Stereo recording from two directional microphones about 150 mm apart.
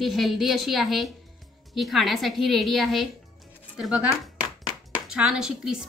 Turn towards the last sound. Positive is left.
turn(degrees=-5)  # may be behind; listen again after turning